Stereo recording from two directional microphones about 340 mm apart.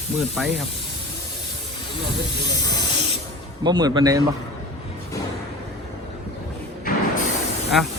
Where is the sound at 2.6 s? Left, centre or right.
Centre.